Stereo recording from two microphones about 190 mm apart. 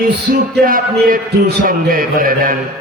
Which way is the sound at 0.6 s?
50° right (ahead or behind).